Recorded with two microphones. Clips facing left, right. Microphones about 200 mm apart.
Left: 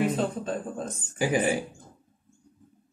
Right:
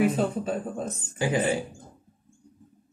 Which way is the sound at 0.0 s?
10° right (ahead or behind).